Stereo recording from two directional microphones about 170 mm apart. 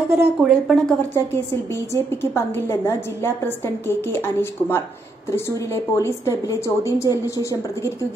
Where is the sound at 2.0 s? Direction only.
15° left (ahead or behind).